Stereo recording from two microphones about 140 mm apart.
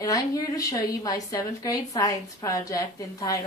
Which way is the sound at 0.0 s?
25° left (ahead or behind).